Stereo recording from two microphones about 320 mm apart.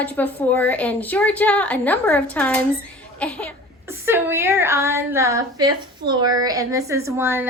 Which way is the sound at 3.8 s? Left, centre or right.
Centre.